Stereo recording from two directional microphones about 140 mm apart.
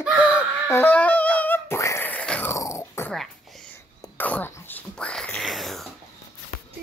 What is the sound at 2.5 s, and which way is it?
Dog, 20° left (ahead or behind).